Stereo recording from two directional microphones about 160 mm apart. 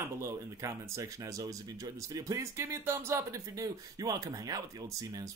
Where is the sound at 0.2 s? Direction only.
20° right (ahead or behind).